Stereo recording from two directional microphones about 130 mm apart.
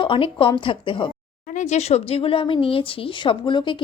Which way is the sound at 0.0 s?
40° left (ahead or behind).